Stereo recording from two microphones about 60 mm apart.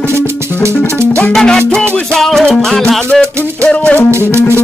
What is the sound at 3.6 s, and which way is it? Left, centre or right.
Music, centre.